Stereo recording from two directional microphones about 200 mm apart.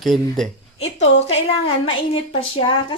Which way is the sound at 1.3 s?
30° left (ahead or behind).